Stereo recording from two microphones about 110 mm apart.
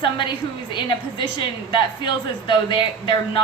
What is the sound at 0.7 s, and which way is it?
A woman's voice, 50° left (ahead or behind).